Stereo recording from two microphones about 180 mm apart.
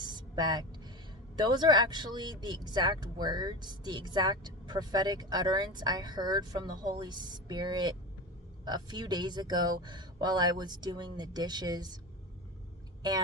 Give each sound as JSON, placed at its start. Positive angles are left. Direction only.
{"t": 0.0, "sound": "vehicle", "side_deg": -25}
{"t": 1.3, "sound": "speech", "side_deg": -25}